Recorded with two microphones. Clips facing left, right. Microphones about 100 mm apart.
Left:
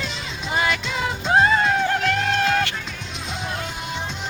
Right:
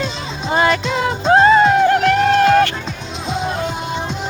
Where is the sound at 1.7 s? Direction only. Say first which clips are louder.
Right 8 dB; 60° right (ahead or behind).